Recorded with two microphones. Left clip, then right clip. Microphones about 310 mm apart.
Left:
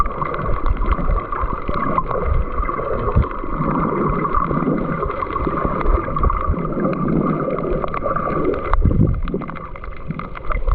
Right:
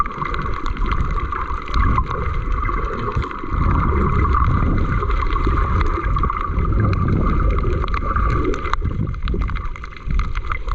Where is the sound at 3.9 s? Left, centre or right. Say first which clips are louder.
Left 2 dB; centre.